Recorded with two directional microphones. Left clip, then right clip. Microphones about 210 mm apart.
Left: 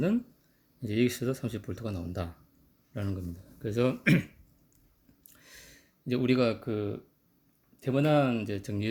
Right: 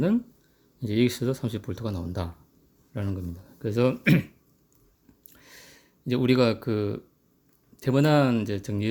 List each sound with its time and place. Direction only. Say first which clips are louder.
0.8 s speech: right 4 dB; 15° right (ahead or behind)
5.3 s a sound: right 3 dB; 10° right (ahead or behind); by 7.0 s 25° right (ahead or behind)
7.8 s speech: right 4 dB; 25° right (ahead or behind)